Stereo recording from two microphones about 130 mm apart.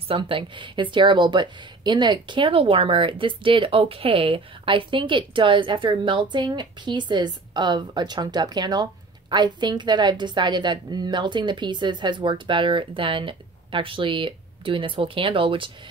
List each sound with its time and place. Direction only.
0.1 s speech: 40° right (ahead or behind)